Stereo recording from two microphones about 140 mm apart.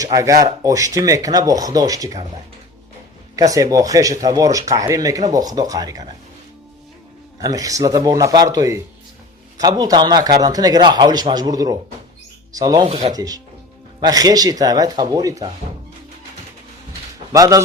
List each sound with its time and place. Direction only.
0.0 s speech: 25° right (ahead or behind)
3.3 s speech: 25° right (ahead or behind)
7.4 s speech: 25° right (ahead or behind)
17.3 s speech: 25° right (ahead or behind)